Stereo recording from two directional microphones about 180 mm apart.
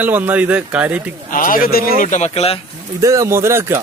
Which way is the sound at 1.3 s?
50° left (ahead or behind).